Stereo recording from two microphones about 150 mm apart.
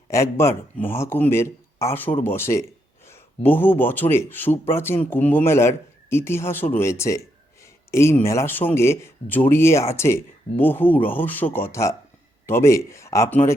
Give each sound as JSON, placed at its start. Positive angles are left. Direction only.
{"t": 0.1, "sound": "speech", "side_deg": 20}